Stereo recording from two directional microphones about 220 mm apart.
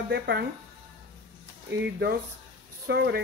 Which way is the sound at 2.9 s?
45° right (ahead or behind).